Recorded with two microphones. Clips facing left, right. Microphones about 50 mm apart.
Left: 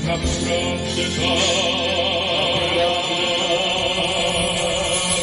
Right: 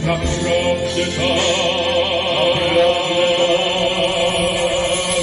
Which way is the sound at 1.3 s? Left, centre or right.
Right.